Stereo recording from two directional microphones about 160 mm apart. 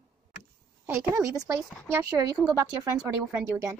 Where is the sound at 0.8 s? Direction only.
15° right (ahead or behind).